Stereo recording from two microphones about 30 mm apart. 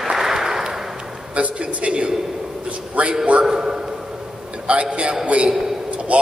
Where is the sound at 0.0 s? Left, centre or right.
Centre.